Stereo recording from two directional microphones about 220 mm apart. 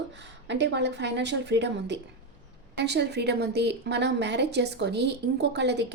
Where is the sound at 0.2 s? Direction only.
50° right (ahead or behind).